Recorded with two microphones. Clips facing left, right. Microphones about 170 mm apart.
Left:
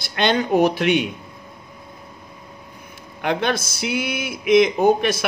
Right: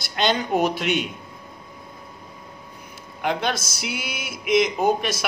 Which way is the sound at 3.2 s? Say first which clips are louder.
Left 3 dB; 55° left (ahead or behind).